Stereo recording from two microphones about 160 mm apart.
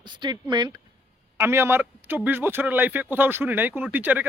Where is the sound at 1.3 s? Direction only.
15° right (ahead or behind).